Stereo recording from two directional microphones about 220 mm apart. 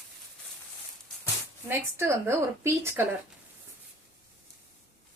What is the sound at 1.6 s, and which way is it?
A woman's voice, 10° right (ahead or behind).